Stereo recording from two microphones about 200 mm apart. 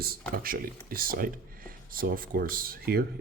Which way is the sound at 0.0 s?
50° right (ahead or behind).